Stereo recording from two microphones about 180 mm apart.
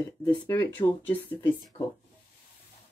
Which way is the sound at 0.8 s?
30° left (ahead or behind).